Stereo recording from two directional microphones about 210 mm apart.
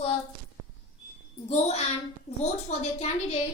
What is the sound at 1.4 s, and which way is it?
A woman's voice, 30° left (ahead or behind).